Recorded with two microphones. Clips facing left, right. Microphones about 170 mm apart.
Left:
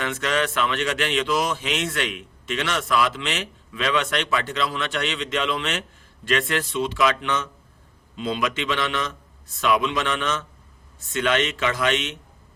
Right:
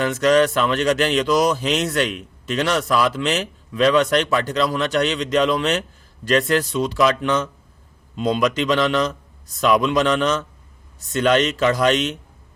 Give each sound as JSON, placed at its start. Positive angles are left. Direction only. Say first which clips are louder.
{"t": 0.0, "sound": "speech", "louder": "right 9 dB", "side_deg": -40}